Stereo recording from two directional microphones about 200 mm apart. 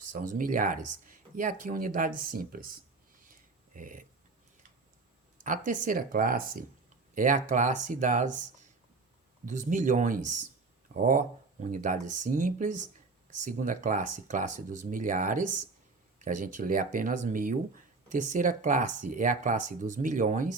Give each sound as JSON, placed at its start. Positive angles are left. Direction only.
{"t": 0.1, "sound": "speech", "side_deg": -45}
{"t": 5.4, "sound": "speech", "side_deg": -40}
{"t": 9.5, "sound": "speech", "side_deg": -40}